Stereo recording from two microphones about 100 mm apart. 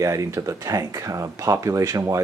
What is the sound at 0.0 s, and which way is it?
Speech, 30° right (ahead or behind).